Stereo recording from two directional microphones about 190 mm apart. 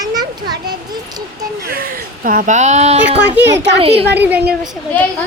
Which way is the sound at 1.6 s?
50° right (ahead or behind).